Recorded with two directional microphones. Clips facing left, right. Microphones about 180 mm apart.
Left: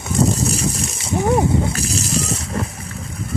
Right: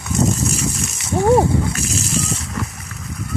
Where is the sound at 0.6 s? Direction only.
30° left (ahead or behind).